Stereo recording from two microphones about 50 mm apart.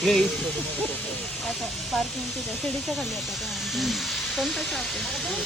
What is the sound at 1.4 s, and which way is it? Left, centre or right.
Speech, centre.